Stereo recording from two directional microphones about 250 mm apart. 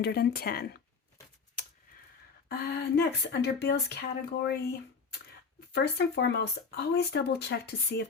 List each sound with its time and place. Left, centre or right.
0.0 s speech: left
1.6 s a sound: left
2.5 s speech: left